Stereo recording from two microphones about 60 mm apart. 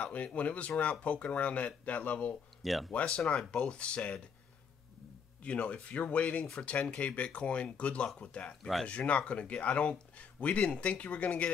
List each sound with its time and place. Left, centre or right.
0.0 s speech: left
2.6 s speech: centre
2.9 s speech: left
3.2 s speech: centre
5.4 s speech: left